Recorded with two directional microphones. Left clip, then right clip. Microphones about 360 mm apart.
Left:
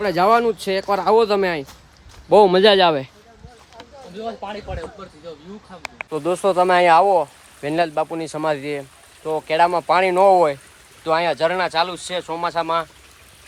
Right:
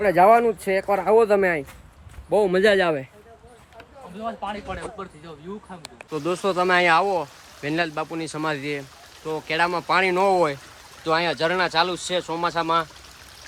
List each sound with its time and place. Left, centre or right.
0.0 s speech: centre
6.1 s speech: centre